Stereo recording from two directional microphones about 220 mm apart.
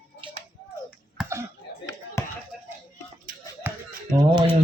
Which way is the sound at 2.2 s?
15° left (ahead or behind).